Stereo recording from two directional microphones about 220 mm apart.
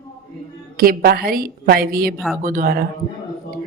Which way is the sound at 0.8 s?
45° right (ahead or behind).